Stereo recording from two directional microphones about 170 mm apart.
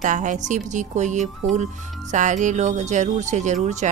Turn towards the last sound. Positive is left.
turn(degrees=-45)  # may be behind; listen again after turning